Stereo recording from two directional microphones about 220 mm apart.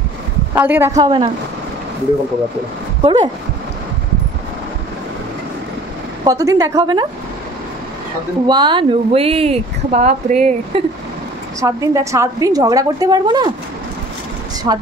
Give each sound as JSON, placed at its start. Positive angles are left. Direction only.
{"t": 0.6, "sound": "a woman's voice", "side_deg": -10}
{"t": 3.0, "sound": "speech", "side_deg": -20}
{"t": 6.2, "sound": "a woman's voice", "side_deg": -15}
{"t": 8.5, "sound": "speech", "side_deg": -20}
{"t": 11.6, "sound": "a woman's voice", "side_deg": -15}
{"t": 14.7, "sound": "a woman's voice", "side_deg": -15}